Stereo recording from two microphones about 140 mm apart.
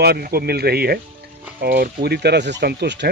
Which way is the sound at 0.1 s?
90° right.